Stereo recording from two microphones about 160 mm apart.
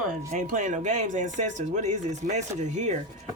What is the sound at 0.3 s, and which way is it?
Speech, 50° right (ahead or behind).